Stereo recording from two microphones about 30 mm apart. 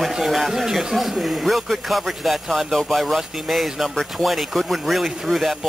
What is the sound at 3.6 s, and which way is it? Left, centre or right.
A man's voice, centre.